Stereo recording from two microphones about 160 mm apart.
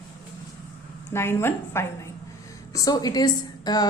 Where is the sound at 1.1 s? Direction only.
15° left (ahead or behind).